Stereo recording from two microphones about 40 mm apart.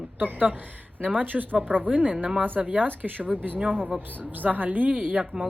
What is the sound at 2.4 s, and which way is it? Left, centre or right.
Speech, right.